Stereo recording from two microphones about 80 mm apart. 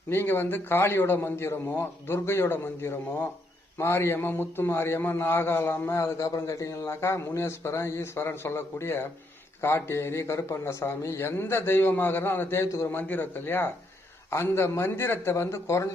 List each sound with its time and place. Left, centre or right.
0.1 s a man's voice: left
12.6 s a man's voice: left
12.9 s a man's voice: left